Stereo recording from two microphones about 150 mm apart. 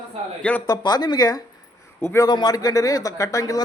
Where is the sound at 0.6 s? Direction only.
30° left (ahead or behind).